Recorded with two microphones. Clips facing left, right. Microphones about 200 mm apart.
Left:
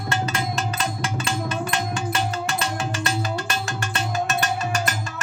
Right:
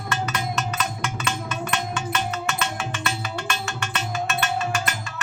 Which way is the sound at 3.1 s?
35° left (ahead or behind).